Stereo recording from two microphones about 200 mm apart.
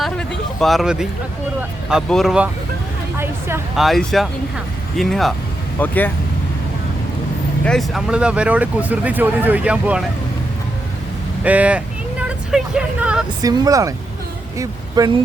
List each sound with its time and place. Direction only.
0.0 s a sound: centre (ahead or behind)
1.9 s speech: centre (ahead or behind)
3.8 s speech: centre (ahead or behind)
7.6 s speech: centre (ahead or behind)
11.4 s speech: 5° right (ahead or behind)
13.4 s speech: 20° right (ahead or behind)